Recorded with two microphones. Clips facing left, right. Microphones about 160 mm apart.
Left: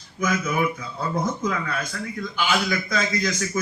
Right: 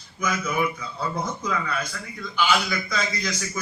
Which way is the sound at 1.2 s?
50° left (ahead or behind).